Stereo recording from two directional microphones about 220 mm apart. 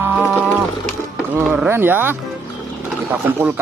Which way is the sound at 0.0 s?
5° right (ahead or behind).